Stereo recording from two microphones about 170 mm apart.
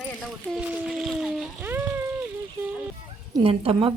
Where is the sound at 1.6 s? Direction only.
15° right (ahead or behind).